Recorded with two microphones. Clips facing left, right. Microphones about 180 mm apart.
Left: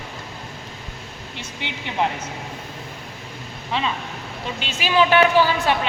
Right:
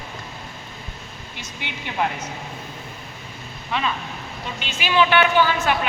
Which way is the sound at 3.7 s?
25° left (ahead or behind).